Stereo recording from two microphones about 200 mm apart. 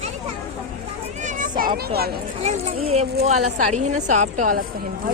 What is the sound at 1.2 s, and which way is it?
Children playing, 40° right (ahead or behind).